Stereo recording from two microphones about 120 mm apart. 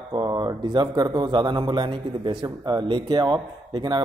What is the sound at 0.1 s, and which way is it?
Speech, 40° right (ahead or behind).